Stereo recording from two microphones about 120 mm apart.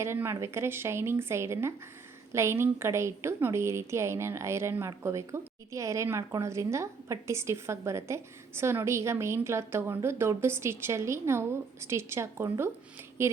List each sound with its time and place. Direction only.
0.0 s a woman's voice: 20° right (ahead or behind)